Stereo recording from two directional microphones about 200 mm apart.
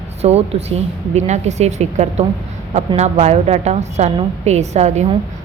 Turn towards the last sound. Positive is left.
turn(degrees=-35)  # may be behind; listen again after turning